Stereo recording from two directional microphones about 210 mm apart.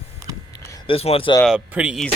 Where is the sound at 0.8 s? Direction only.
25° left (ahead or behind).